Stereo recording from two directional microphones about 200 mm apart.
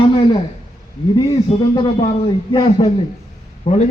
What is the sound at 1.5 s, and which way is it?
A man's voice, 30° left (ahead or behind).